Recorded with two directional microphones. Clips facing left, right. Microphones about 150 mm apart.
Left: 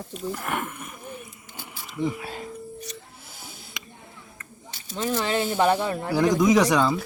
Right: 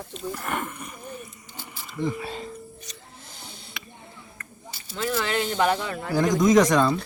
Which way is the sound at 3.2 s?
5° left (ahead or behind).